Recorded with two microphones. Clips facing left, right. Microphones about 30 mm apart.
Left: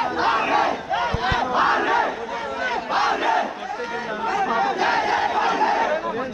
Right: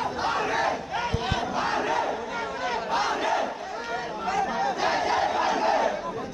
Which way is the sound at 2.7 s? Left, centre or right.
Centre.